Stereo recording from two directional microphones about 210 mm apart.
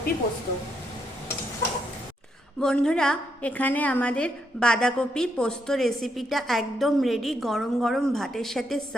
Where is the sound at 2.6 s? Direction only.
5° left (ahead or behind).